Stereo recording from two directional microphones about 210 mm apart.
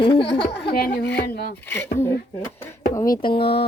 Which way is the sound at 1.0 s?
55° left (ahead or behind).